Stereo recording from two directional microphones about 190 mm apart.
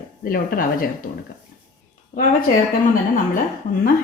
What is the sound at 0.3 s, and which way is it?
Speech, 50° left (ahead or behind).